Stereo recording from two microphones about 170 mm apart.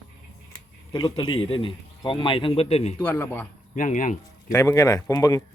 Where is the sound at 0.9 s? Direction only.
30° left (ahead or behind).